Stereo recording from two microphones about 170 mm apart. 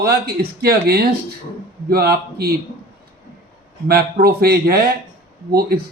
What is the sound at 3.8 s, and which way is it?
A man's voice, 65° right (ahead or behind).